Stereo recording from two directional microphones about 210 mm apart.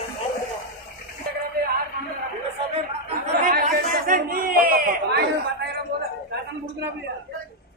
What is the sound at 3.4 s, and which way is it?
Chatter, 40° right (ahead or behind).